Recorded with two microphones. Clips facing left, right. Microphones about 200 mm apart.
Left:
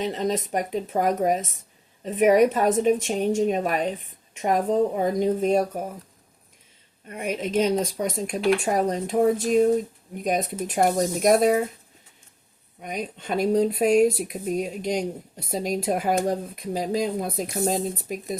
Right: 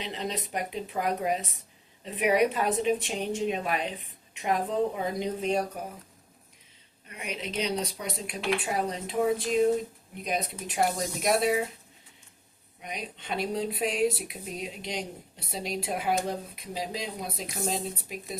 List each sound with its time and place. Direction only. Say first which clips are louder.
0.0 s speech: left 9 dB; 45° left (ahead or behind)
7.1 s speech: left 10 dB; 50° left (ahead or behind)
12.8 s speech: left 7 dB; 45° left (ahead or behind)